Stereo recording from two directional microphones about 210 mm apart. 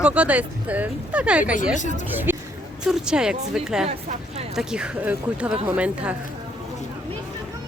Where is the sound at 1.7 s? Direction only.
35° left (ahead or behind).